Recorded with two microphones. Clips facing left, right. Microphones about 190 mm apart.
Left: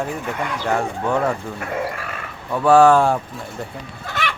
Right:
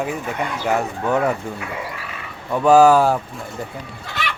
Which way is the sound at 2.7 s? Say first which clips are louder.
Even; 5° right (ahead or behind).